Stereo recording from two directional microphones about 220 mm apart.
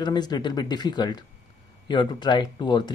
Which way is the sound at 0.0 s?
20° left (ahead or behind).